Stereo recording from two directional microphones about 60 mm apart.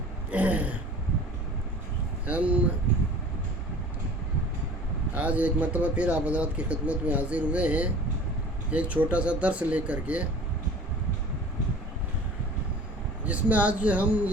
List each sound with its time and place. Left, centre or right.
0.3 s speech: right
2.2 s speech: right
5.1 s speech: right
13.2 s speech: right